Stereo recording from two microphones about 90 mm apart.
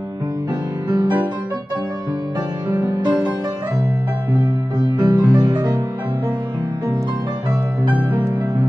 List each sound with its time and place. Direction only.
0.8 s music: 55° right (ahead or behind)
3.0 s music: 50° right (ahead or behind)
4.7 s music: 50° right (ahead or behind)